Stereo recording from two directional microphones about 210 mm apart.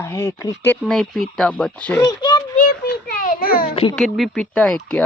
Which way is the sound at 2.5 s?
40° left (ahead or behind).